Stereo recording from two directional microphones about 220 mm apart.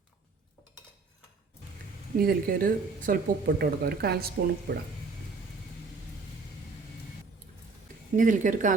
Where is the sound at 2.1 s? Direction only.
40° right (ahead or behind).